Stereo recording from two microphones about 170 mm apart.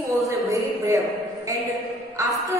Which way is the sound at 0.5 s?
20° right (ahead or behind).